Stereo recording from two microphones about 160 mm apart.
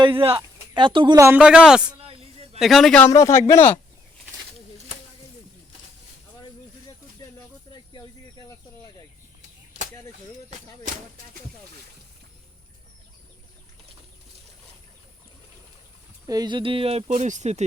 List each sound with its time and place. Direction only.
0.0 s speech: 35° right (ahead or behind)
1.2 s speech: 10° right (ahead or behind)
1.9 s a sound: 35° right (ahead or behind)
2.6 s a man's voice: centre (ahead or behind)
3.0 s speech: 20° left (ahead or behind)
6.4 s snake: 25° left (ahead or behind)
16.2 s speech: 25° right (ahead or behind); by 17.6 s 45° right (ahead or behind)